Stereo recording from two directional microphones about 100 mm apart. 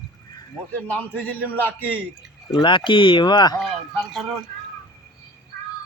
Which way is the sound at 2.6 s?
55° left (ahead or behind).